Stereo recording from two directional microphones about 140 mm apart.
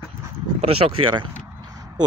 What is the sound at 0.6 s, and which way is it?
Speech, 45° right (ahead or behind).